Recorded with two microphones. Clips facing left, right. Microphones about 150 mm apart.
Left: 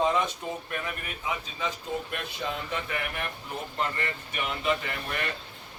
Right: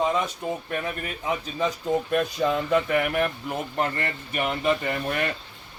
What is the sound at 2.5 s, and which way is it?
Speech, 65° right (ahead or behind).